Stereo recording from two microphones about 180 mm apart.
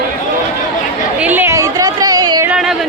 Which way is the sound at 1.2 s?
10° right (ahead or behind).